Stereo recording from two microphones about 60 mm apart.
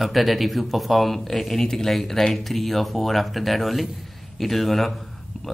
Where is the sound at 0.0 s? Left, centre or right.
Centre.